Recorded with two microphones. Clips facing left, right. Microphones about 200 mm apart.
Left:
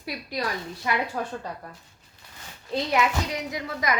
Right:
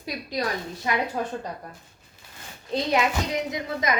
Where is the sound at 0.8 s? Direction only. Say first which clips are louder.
Right 1 dB; 20° right (ahead or behind).